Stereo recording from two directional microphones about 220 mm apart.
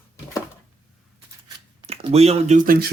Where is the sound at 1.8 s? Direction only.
25° right (ahead or behind).